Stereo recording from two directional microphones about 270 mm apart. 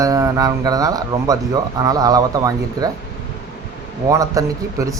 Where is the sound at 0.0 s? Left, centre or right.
Centre.